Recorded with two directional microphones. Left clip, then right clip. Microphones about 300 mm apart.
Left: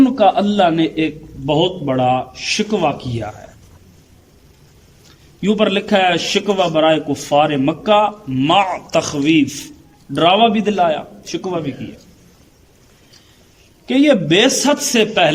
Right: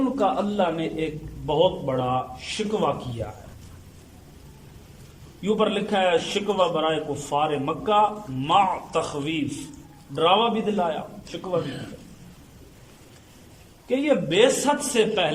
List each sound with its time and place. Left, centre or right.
0.2 s a man's voice: left
5.4 s a man's voice: left
13.8 s a man's voice: left